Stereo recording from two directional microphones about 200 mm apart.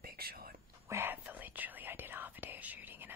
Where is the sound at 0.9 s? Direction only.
10° right (ahead or behind).